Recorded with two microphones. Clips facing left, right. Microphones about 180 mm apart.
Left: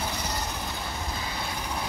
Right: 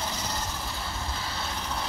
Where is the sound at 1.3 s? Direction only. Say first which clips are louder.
Left 1 dB; 15° left (ahead or behind).